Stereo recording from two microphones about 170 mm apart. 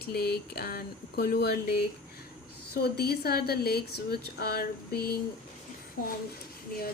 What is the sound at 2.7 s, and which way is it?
Speech, 70° left (ahead or behind).